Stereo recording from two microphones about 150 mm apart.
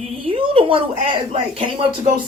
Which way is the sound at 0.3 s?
35° right (ahead or behind).